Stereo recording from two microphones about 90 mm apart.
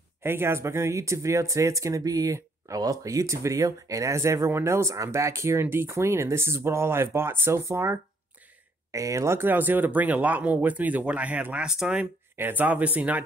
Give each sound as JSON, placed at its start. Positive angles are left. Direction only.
{"t": 0.2, "sound": "speech", "side_deg": -25}
{"t": 12.4, "sound": "speech", "side_deg": -20}